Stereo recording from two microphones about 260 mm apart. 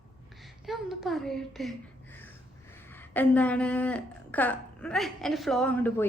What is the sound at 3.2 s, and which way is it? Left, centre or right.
A woman's voice, centre.